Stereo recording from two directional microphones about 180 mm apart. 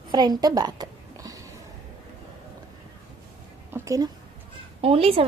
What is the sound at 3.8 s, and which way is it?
Speech, 20° right (ahead or behind).